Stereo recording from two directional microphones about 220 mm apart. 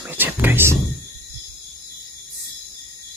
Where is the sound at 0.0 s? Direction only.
10° right (ahead or behind).